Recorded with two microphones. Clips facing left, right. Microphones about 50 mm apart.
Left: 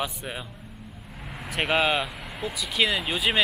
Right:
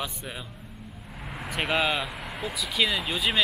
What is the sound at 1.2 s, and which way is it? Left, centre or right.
Speech, centre.